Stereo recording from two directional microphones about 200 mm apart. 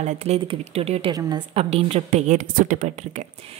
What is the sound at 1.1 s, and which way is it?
Speech, 20° right (ahead or behind).